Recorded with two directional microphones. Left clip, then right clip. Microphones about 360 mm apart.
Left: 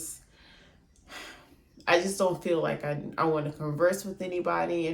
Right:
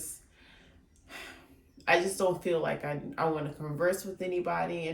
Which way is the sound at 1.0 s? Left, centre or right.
Centre.